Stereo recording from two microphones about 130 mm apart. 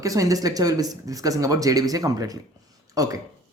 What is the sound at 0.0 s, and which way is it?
Speech, 25° right (ahead or behind).